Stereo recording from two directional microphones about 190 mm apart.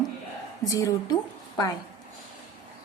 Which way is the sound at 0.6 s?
15° left (ahead or behind).